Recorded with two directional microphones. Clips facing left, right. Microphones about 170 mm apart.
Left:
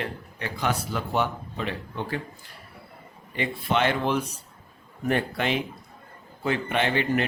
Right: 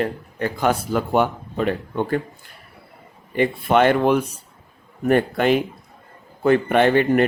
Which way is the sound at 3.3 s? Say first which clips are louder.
Right 8 dB; 50° right (ahead or behind).